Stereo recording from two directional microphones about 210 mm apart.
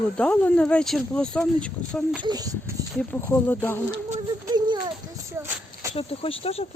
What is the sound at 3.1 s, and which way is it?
Speech, 10° left (ahead or behind).